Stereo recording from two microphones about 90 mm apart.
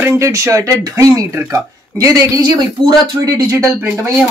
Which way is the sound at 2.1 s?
40° right (ahead or behind).